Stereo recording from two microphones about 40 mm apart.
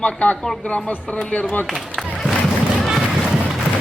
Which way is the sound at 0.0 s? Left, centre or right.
Left.